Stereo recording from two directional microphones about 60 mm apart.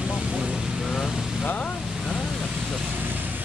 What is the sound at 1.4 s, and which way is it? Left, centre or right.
Vehicle, left.